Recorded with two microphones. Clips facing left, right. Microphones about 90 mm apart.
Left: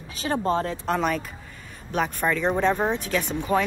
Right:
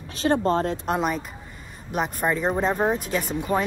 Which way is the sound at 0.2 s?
25° right (ahead or behind).